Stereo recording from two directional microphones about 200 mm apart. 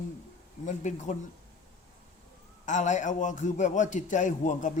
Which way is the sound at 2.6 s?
40° left (ahead or behind).